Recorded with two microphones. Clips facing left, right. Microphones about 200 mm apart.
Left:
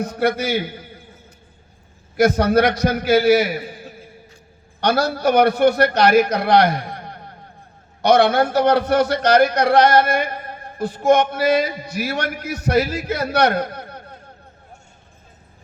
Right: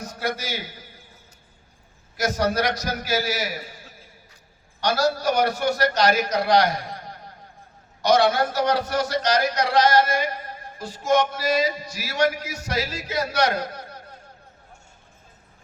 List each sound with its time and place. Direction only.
0.0 s speech: 60° left (ahead or behind)
2.1 s a man's voice: 60° left (ahead or behind)